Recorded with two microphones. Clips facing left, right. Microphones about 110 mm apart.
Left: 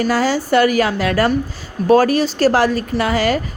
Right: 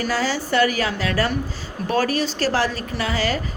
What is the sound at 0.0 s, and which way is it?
A woman's voice, 45° left (ahead or behind).